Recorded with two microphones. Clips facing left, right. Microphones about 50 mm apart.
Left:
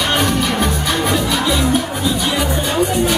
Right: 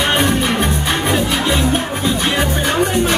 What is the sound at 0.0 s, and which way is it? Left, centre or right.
Music, right.